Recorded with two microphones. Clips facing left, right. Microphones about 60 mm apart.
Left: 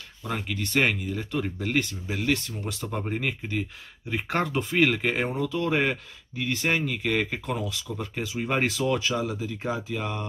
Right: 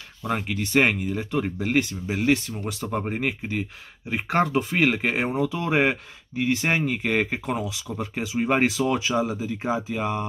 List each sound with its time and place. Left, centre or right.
0.2 s speech: centre